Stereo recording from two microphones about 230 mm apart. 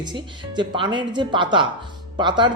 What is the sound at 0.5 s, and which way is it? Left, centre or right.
Speech, centre.